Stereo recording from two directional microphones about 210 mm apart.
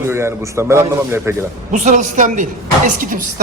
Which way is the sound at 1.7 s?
35° right (ahead or behind).